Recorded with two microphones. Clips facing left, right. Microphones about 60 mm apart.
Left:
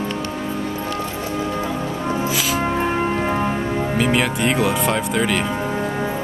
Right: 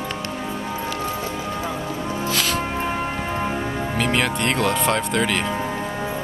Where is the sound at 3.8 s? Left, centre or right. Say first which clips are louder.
Left 3 dB; centre.